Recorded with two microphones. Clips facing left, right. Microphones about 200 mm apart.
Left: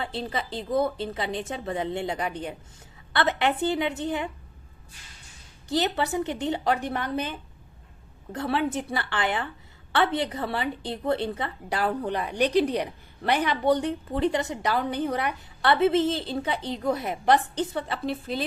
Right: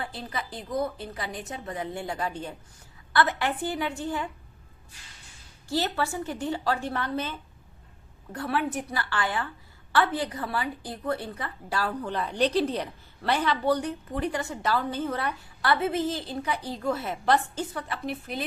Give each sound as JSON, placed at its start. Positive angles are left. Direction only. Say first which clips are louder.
{"t": 0.0, "sound": "a woman's voice", "louder": "left 4 dB", "side_deg": 25}
{"t": 5.6, "sound": "a woman's voice", "louder": "left 2 dB", "side_deg": 20}
{"t": 15.7, "sound": "a woman's voice", "louder": "left 5 dB", "side_deg": 25}